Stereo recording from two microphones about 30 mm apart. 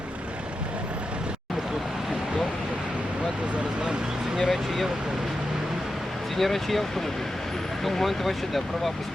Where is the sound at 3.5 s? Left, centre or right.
Right.